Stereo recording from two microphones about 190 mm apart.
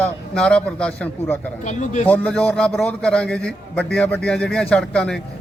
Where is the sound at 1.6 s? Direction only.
40° left (ahead or behind).